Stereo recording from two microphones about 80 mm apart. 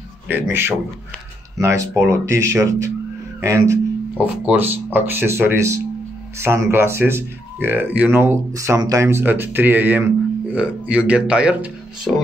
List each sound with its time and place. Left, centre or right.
0.3 s speech: right
4.2 s speech: right
8.5 s speech: right
9.2 s speech: right